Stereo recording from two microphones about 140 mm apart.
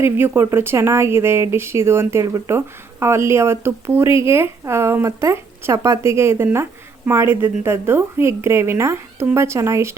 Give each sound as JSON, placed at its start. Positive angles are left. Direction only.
{"t": 0.0, "sound": "speech", "side_deg": -15}